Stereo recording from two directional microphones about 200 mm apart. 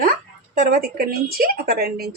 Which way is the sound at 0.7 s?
45° right (ahead or behind).